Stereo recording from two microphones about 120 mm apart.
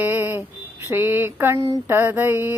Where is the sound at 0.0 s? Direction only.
15° right (ahead or behind).